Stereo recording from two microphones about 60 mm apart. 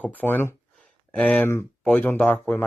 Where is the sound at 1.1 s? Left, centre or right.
Left.